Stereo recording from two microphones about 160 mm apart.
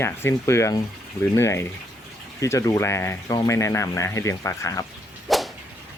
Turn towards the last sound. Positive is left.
turn(degrees=0)  # may be behind; listen again after turning